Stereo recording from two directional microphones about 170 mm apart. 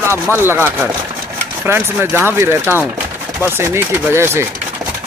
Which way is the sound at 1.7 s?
15° right (ahead or behind).